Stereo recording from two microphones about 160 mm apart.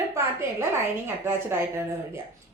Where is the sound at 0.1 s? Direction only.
15° right (ahead or behind).